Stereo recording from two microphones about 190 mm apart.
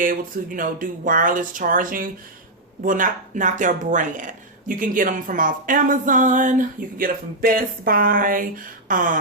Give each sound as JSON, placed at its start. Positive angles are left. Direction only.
{"t": 0.0, "sound": "speech", "side_deg": -45}